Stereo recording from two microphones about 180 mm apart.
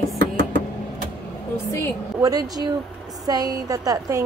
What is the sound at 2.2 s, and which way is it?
A woman's voice, 20° right (ahead or behind).